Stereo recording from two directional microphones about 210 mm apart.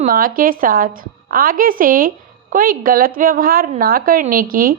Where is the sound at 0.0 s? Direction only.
40° right (ahead or behind).